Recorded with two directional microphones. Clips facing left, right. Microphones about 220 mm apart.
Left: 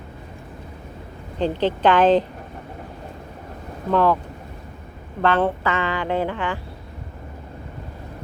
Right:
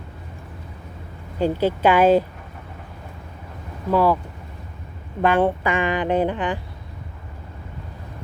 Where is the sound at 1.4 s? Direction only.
10° right (ahead or behind).